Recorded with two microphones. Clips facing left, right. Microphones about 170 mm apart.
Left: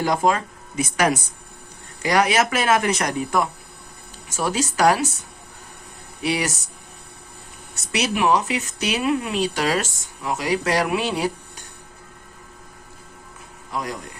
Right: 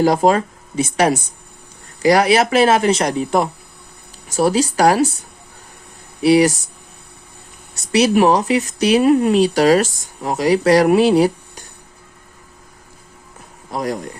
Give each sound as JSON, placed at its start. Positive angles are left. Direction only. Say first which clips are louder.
{"t": 0.0, "sound": "speech", "louder": "right 6 dB", "side_deg": -35}
{"t": 6.2, "sound": "speech", "louder": "right 12 dB", "side_deg": -35}
{"t": 7.9, "sound": "speech", "louder": "right 7 dB", "side_deg": -35}
{"t": 13.7, "sound": "speech", "louder": "right 6 dB", "side_deg": -40}